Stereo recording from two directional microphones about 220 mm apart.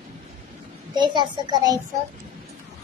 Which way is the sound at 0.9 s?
20° right (ahead or behind).